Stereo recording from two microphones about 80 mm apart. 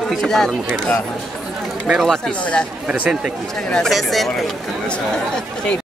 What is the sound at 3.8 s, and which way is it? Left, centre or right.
Speech, centre.